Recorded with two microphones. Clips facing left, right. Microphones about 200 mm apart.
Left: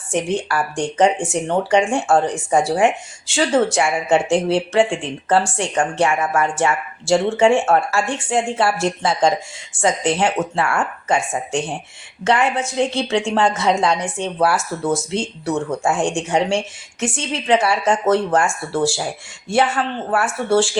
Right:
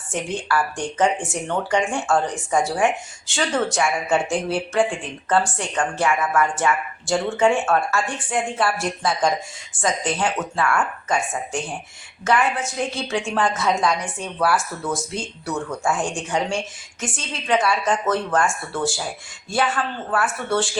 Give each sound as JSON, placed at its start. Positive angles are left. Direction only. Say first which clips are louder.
{"t": 0.1, "sound": "a woman's voice", "louder": "left 4 dB", "side_deg": 25}